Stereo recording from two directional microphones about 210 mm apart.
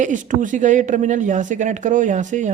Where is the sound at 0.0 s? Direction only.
35° right (ahead or behind).